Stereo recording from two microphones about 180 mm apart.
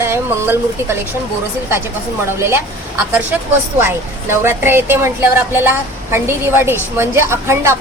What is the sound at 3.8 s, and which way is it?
Speech, 15° right (ahead or behind).